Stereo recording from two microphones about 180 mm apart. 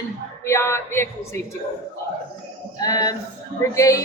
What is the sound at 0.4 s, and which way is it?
Speech, 15° left (ahead or behind).